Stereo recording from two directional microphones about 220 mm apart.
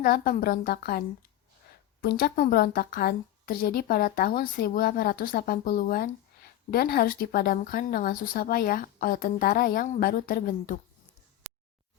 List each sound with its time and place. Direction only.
0.0 s a woman's voice: 40° left (ahead or behind)